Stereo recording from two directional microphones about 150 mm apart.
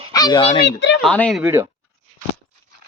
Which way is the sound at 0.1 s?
25° left (ahead or behind).